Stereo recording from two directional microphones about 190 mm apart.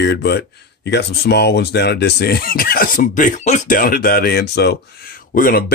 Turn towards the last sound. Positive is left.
turn(degrees=50)  # may be behind; listen again after turning